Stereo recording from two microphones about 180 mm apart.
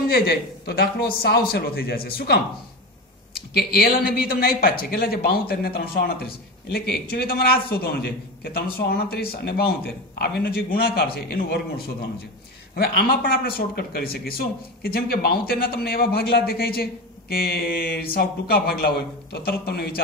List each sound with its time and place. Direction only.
0.1 s speech: 60° left (ahead or behind)
3.5 s speech: 60° left (ahead or behind)